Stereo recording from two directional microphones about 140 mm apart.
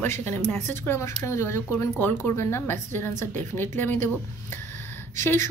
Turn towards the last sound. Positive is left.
turn(degrees=20)  # may be behind; listen again after turning